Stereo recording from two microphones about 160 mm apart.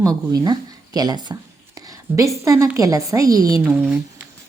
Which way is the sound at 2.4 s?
20° right (ahead or behind).